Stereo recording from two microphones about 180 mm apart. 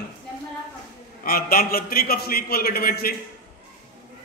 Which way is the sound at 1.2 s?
55° left (ahead or behind).